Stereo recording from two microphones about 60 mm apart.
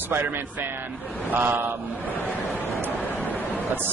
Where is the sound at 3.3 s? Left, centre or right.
Right.